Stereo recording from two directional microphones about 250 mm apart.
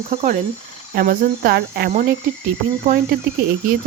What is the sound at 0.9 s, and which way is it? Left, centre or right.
Cricket, right.